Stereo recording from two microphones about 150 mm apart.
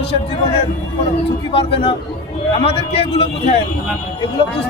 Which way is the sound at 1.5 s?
35° left (ahead or behind).